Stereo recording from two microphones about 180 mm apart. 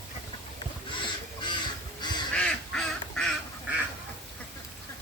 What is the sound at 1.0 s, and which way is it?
Crow, 25° left (ahead or behind).